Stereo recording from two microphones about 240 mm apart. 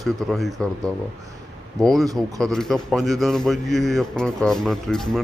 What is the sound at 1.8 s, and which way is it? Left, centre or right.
A man's voice, centre.